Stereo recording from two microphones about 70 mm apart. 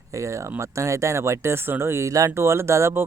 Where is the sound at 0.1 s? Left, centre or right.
Right.